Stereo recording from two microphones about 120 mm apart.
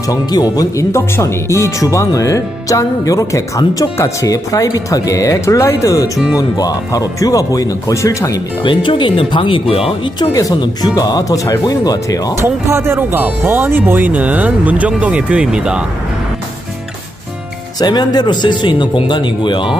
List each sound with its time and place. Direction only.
0.1 s speech: 35° left (ahead or behind)
8.6 s speech: 45° left (ahead or behind)
10.0 s speech: 30° left (ahead or behind)
12.4 s speech: 20° right (ahead or behind)
17.7 s speech: 35° left (ahead or behind)